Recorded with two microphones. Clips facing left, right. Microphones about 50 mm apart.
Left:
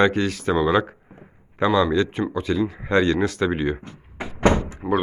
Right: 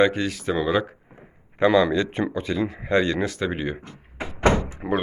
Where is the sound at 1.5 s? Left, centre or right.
Right.